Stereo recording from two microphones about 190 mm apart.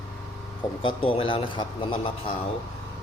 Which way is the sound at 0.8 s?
30° left (ahead or behind).